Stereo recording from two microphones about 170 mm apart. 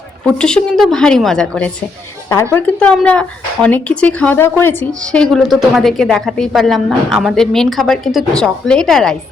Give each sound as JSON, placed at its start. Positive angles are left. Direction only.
{"t": 0.3, "sound": "speech", "side_deg": 5}
{"t": 2.3, "sound": "speech", "side_deg": 20}
{"t": 2.7, "sound": "speech", "side_deg": 5}